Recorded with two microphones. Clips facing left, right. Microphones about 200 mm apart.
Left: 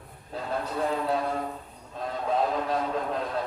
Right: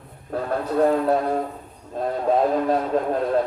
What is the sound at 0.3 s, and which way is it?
A man's voice, 50° right (ahead or behind).